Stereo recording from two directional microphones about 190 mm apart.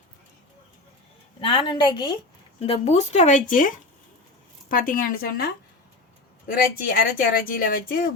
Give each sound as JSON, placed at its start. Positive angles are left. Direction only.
{"t": 1.4, "sound": "a woman's voice", "side_deg": 25}
{"t": 6.5, "sound": "speech", "side_deg": 50}